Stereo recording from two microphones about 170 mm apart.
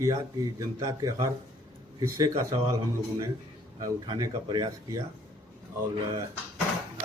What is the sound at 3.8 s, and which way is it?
A man's voice, 25° right (ahead or behind).